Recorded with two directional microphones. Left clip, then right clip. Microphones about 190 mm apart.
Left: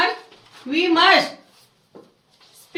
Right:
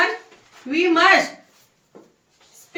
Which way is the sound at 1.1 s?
Centre (ahead or behind).